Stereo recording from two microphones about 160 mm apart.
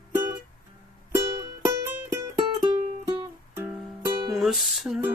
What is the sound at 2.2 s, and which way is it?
Music, 25° right (ahead or behind).